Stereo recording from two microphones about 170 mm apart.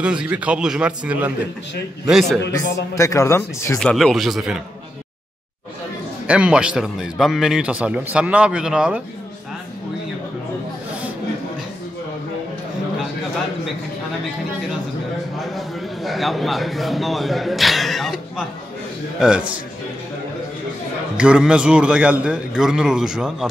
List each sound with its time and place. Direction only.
0.0 s a man's voice: 5° right (ahead or behind)
2.6 s speech: 20° left (ahead or behind)
3.9 s speech: centre (ahead or behind)
6.2 s speech: 5° right (ahead or behind)
15.4 s a man's voice: centre (ahead or behind)
21.2 s speech: 5° right (ahead or behind)